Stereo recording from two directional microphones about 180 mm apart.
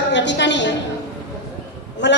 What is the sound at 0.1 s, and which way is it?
Speech, 75° left (ahead or behind).